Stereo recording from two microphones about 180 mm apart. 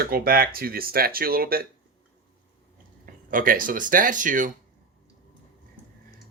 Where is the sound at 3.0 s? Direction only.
50° right (ahead or behind).